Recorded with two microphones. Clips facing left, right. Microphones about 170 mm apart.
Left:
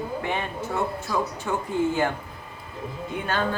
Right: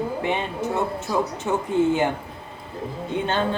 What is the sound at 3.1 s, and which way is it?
Speech, 25° right (ahead or behind).